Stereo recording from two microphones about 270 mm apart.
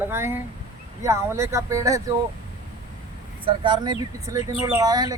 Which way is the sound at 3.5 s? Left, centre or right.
Centre.